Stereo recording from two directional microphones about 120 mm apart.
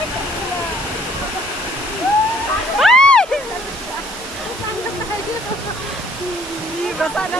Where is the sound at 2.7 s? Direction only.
5° left (ahead or behind).